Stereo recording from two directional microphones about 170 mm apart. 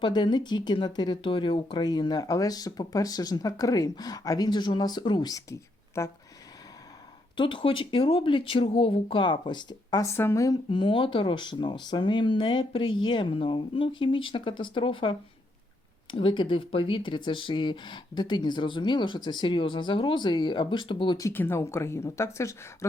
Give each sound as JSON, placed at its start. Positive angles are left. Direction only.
{"t": 0.0, "sound": "speech", "side_deg": 25}
{"t": 7.3, "sound": "speech", "side_deg": 30}
{"t": 16.1, "sound": "speech", "side_deg": 30}
{"t": 21.2, "sound": "speech", "side_deg": 15}